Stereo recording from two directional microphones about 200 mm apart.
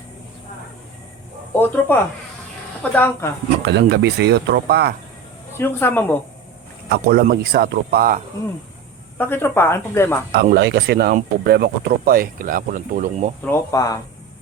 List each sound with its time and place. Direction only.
1.5 s speech: 10° left (ahead or behind)
3.7 s speech: 60° right (ahead or behind)
5.5 s speech: 10° left (ahead or behind)
6.9 s speech: 50° right (ahead or behind)
9.1 s speech: 10° left (ahead or behind)
10.5 s speech: 55° right (ahead or behind)
13.4 s speech: 15° left (ahead or behind)